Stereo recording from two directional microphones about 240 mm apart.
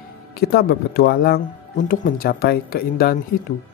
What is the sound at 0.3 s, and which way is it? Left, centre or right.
Speech, left.